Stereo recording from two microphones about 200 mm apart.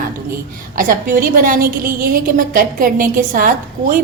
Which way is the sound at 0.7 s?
45° right (ahead or behind).